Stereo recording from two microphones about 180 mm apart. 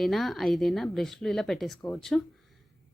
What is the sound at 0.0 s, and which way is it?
Speech, centre (ahead or behind).